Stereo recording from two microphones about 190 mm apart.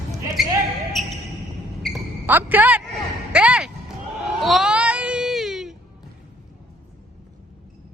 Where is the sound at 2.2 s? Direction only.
10° right (ahead or behind).